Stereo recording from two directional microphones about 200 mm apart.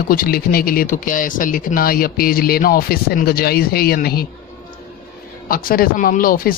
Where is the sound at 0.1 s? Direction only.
45° left (ahead or behind).